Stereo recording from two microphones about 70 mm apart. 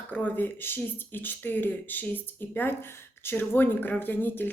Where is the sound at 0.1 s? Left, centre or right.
Left.